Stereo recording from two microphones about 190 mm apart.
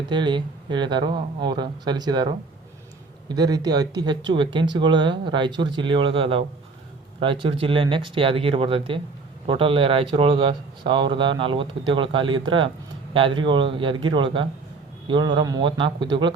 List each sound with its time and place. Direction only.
0.1 s speech: 25° right (ahead or behind)